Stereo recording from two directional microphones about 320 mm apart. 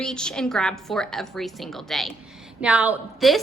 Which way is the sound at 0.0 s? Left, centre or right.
Centre.